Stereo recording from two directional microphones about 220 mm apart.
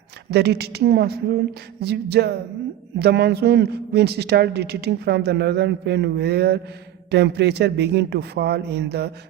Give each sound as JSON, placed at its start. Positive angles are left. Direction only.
{"t": 0.3, "sound": "a woman's voice", "side_deg": -50}